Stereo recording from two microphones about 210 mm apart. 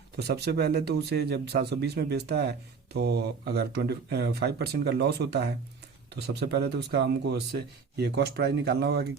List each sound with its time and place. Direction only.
0.2 s speech: 50° right (ahead or behind)